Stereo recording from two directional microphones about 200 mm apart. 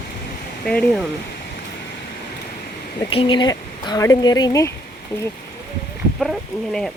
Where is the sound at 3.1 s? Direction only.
25° left (ahead or behind).